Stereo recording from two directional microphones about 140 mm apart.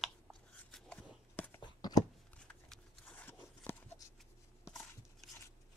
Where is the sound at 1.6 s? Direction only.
30° left (ahead or behind).